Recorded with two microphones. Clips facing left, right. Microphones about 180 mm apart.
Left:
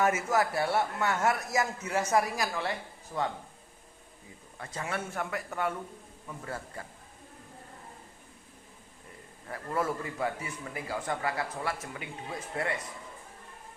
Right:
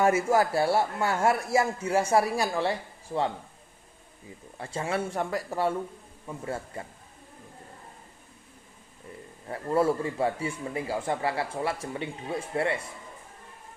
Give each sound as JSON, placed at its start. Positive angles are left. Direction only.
{"t": 0.0, "sound": "speech", "side_deg": -30}
{"t": 4.5, "sound": "speech", "side_deg": -30}
{"t": 9.5, "sound": "speech", "side_deg": -30}